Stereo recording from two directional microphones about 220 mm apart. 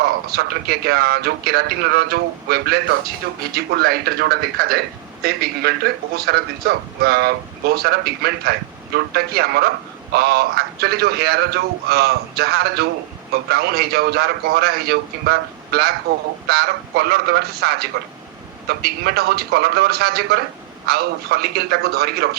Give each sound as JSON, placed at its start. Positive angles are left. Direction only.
{"t": 0.0, "sound": "a man's voice", "side_deg": -45}